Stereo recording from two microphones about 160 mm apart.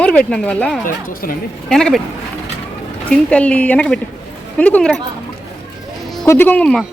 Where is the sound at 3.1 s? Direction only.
5° left (ahead or behind).